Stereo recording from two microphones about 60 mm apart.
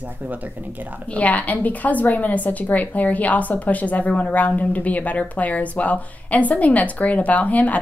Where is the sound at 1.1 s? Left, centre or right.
Left.